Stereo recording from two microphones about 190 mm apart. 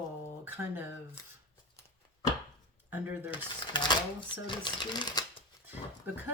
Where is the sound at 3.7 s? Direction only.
25° left (ahead or behind).